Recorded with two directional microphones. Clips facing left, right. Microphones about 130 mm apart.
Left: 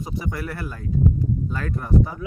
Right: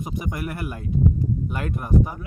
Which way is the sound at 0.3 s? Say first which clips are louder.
Right 1 dB; 15° right (ahead or behind).